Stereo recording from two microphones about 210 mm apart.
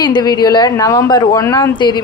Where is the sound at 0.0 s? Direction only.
20° left (ahead or behind).